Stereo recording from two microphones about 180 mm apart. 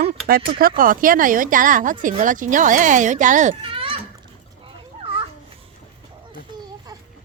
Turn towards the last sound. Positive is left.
turn(degrees=-20)  # may be behind; listen again after turning